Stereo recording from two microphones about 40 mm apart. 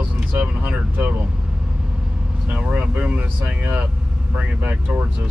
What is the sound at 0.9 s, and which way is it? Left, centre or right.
Speech, right.